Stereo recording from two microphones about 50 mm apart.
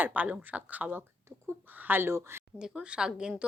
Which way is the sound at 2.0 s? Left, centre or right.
Right.